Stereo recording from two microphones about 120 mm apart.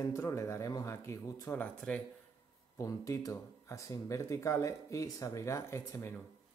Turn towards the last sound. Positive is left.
turn(degrees=20)  # may be behind; listen again after turning